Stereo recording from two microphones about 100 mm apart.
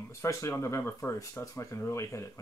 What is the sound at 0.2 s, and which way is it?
Speech, 30° left (ahead or behind).